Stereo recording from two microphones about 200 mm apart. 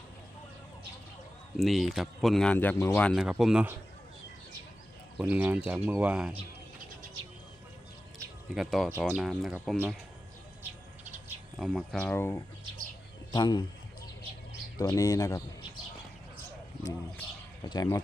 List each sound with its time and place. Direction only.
1.5 s speech: centre (ahead or behind)
5.2 s speech: 10° right (ahead or behind)
8.5 s speech: centre (ahead or behind)
11.5 s speech: centre (ahead or behind)
13.3 s a man's voice: 20° left (ahead or behind)
14.8 s speech: 15° left (ahead or behind)
16.8 s bird: 20° left (ahead or behind)